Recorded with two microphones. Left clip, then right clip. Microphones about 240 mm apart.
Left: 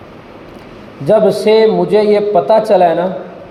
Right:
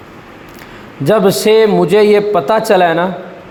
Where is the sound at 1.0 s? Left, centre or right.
Right.